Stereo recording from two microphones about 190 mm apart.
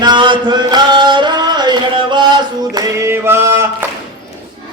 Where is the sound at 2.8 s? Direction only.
15° right (ahead or behind).